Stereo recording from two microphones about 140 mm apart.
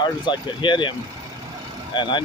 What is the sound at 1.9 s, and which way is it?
Speech, 30° left (ahead or behind).